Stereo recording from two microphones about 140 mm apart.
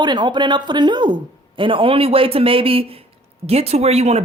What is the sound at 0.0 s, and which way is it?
Speech, 30° right (ahead or behind).